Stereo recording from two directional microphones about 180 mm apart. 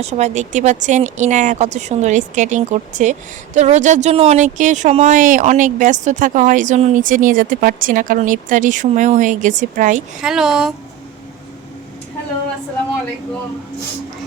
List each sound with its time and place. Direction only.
0.0 s speech: 40° right (ahead or behind)
10.2 s speech: 5° right (ahead or behind)